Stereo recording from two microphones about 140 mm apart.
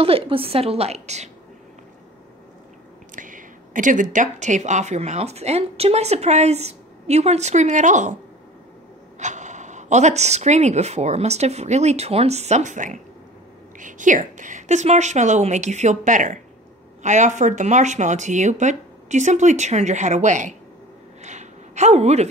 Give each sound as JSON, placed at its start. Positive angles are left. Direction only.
{"t": 0.0, "sound": "speech", "side_deg": -40}
{"t": 3.2, "sound": "speech", "side_deg": -70}
{"t": 9.2, "sound": "speech", "side_deg": -55}
{"t": 21.2, "sound": "a sound", "side_deg": -55}